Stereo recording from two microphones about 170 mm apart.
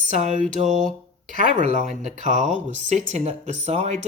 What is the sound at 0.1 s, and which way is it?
Speech, 45° right (ahead or behind).